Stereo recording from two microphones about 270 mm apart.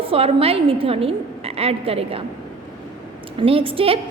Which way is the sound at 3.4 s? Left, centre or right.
Centre.